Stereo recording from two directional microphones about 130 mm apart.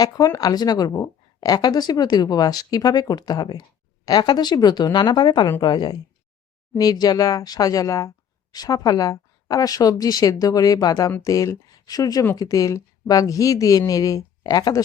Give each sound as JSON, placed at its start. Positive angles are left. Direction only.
{"t": 0.0, "sound": "speech", "side_deg": 30}